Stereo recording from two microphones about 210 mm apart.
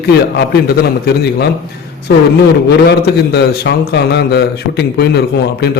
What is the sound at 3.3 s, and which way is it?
A man's voice, 55° left (ahead or behind).